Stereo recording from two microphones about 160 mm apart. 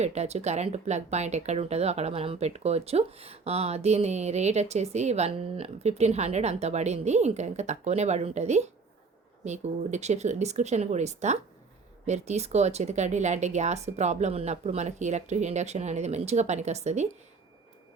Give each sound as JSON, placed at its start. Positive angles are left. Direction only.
{"t": 0.0, "sound": "speech", "side_deg": -45}